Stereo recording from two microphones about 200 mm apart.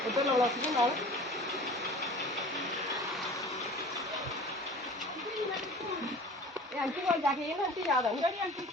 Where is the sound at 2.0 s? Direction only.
Centre (ahead or behind).